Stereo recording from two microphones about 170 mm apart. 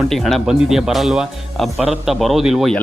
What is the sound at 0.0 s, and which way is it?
A man's voice, centre (ahead or behind).